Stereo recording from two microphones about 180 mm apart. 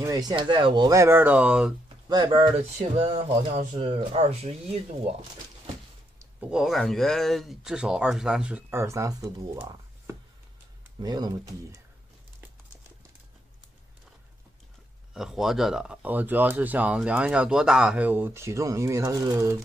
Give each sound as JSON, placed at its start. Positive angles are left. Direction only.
{"t": 0.0, "sound": "speech", "side_deg": -20}
{"t": 2.0, "sound": "speech", "side_deg": -25}
{"t": 3.0, "sound": "speech", "side_deg": -35}
{"t": 6.5, "sound": "speech", "side_deg": 0}
{"t": 15.1, "sound": "speech", "side_deg": 0}